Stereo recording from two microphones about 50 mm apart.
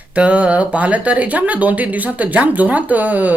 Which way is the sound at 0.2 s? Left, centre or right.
Right.